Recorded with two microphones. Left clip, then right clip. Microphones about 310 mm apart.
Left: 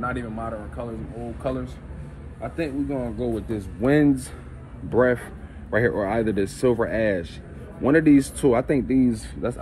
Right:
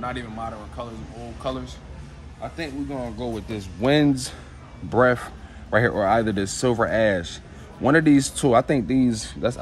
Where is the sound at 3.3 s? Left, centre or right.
Right.